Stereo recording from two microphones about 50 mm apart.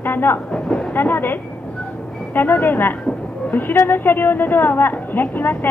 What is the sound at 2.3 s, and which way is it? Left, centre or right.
Speech, left.